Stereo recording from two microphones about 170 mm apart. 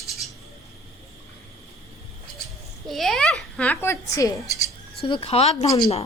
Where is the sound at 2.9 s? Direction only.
Centre (ahead or behind); by 4.3 s 15° left (ahead or behind).